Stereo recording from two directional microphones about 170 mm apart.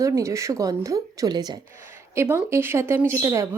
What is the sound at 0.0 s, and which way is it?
Speech, 20° right (ahead or behind).